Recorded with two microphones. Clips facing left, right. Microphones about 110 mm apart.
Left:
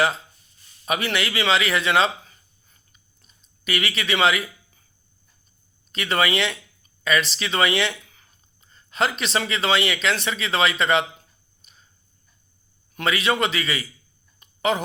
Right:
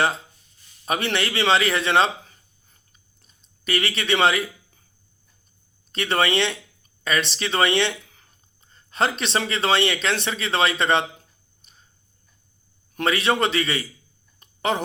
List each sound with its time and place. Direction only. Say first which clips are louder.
0.9 s speech: even; 30° right (ahead or behind)
3.7 s speech: right 2 dB; 30° right (ahead or behind)
5.9 s speech: right 1 dB; 30° right (ahead or behind)
11.6 s a sound: even; 35° right (ahead or behind)
13.0 s speech: right 1 dB; 35° right (ahead or behind)
14.3 s a sound: left 1 dB; 30° right (ahead or behind)